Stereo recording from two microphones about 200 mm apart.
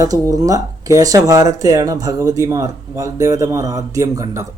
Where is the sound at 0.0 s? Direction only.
20° right (ahead or behind).